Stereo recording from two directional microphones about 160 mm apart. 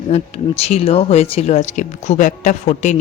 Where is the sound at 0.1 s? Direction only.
40° left (ahead or behind).